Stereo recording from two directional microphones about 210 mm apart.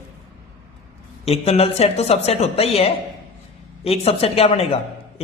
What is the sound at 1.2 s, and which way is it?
A man's voice, 30° left (ahead or behind).